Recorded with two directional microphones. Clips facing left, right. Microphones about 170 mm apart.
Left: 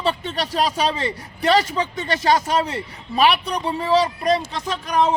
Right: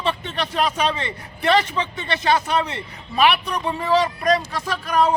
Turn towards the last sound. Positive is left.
turn(degrees=20)  # may be behind; listen again after turning